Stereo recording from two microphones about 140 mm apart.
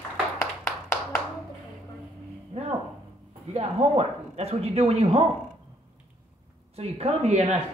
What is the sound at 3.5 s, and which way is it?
Speech, 45° right (ahead or behind).